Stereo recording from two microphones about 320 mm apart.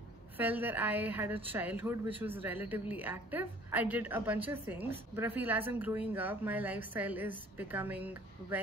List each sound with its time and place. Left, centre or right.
0.4 s a woman's voice: centre